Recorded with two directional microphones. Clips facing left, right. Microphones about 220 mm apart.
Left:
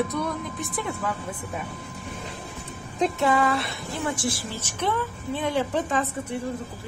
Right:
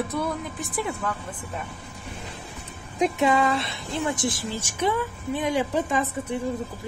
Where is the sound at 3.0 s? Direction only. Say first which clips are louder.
Right 1 dB; 20° right (ahead or behind).